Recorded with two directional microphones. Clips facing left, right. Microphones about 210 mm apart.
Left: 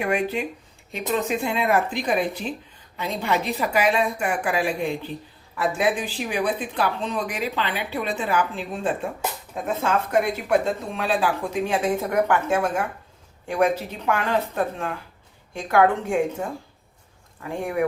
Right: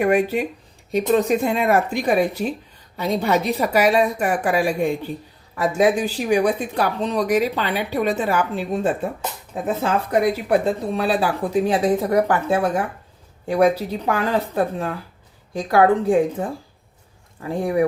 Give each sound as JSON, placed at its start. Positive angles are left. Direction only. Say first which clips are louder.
{"t": 0.0, "sound": "speech", "louder": "right 6 dB", "side_deg": -45}
{"t": 9.8, "sound": "speech", "louder": "right 3 dB", "side_deg": -35}